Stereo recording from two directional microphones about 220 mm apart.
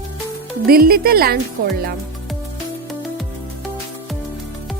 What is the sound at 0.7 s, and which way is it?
Speech, 45° right (ahead or behind).